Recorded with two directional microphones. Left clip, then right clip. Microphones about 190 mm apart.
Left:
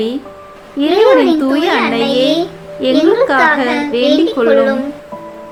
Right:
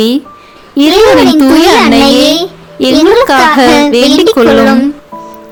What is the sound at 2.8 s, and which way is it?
A woman's voice, 60° right (ahead or behind).